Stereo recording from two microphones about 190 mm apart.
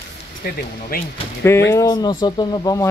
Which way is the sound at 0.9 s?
50° left (ahead or behind).